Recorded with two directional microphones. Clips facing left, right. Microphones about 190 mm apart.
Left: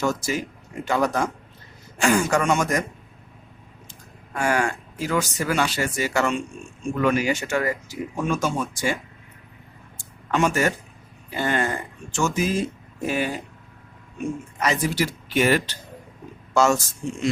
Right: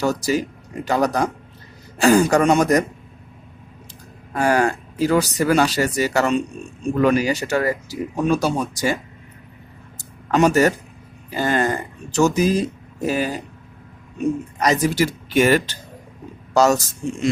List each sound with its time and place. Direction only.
0.0 s speech: 35° right (ahead or behind)
4.4 s speech: 35° right (ahead or behind)
10.0 s a sound: 40° right (ahead or behind)
11.3 s speech: 40° right (ahead or behind)